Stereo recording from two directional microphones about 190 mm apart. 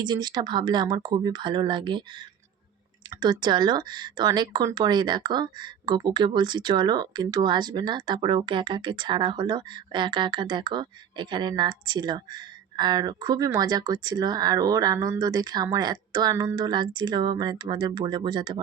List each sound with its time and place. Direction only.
0.0 s speech: 20° right (ahead or behind)